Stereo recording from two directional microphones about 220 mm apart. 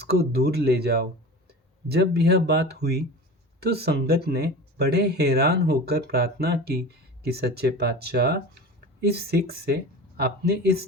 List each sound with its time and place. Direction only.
0.0 s speech: 45° right (ahead or behind)